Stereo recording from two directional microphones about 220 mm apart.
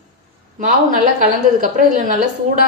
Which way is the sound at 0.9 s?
35° right (ahead or behind).